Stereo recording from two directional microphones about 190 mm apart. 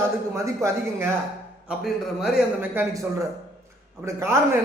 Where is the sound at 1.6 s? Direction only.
Centre (ahead or behind).